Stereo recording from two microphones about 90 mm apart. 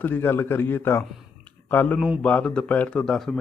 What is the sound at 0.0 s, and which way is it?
A man's voice, 25° left (ahead or behind).